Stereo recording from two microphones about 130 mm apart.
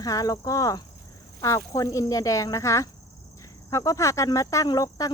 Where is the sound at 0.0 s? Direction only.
25° left (ahead or behind).